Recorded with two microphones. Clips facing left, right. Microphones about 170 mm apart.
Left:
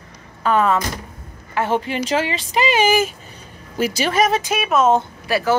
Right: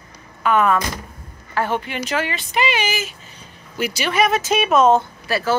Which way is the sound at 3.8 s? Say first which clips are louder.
Left 2 dB; 40° left (ahead or behind).